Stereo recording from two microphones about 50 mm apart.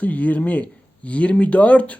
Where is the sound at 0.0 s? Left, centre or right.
Left.